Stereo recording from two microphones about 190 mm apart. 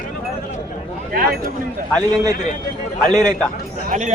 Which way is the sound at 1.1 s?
50° right (ahead or behind).